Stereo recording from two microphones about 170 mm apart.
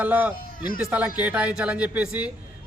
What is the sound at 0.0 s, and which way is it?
A man's voice, 10° right (ahead or behind).